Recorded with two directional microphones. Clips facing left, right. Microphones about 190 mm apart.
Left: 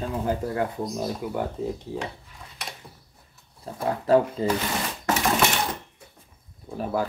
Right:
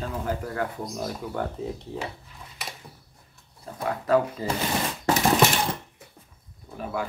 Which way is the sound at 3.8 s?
25° left (ahead or behind).